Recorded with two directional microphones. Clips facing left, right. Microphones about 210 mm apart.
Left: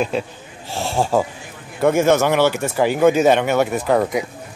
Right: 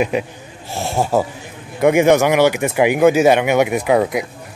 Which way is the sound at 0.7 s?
15° right (ahead or behind).